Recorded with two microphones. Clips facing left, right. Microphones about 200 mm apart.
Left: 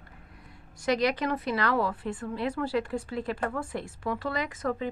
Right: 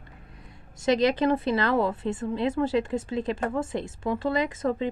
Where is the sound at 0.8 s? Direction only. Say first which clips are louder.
Right 4 dB; 25° right (ahead or behind).